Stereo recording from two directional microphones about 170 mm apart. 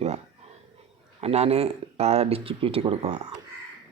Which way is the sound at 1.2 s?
35° right (ahead or behind).